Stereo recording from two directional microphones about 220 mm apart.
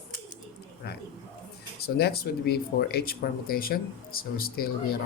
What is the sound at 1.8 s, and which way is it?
Speech, 45° left (ahead or behind).